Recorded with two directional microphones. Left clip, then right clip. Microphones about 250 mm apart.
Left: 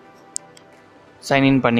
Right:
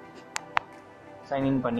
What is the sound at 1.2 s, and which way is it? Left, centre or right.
Speech, left.